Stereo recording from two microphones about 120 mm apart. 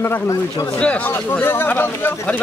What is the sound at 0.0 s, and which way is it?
Speech, 25° left (ahead or behind).